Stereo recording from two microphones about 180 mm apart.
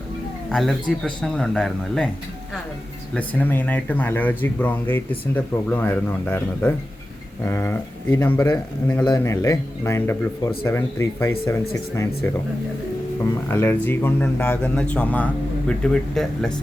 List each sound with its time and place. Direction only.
0.5 s speech: centre (ahead or behind)
3.2 s speech: 10° left (ahead or behind)
13.5 s speech: 10° left (ahead or behind)